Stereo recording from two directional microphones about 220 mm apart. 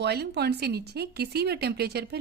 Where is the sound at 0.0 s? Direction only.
50° right (ahead or behind).